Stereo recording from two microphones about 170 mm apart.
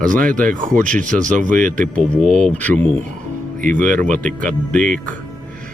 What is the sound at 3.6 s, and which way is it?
Speech, 50° right (ahead or behind).